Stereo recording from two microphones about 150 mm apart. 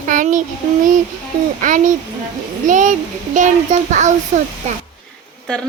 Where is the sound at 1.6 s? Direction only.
60° right (ahead or behind).